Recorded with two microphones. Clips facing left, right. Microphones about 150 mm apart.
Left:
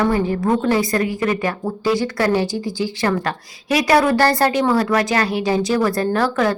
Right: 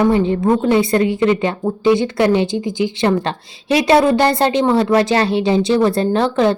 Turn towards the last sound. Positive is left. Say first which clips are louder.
# right 3 dB
turn(degrees=-25)  # may be behind; listen again after turning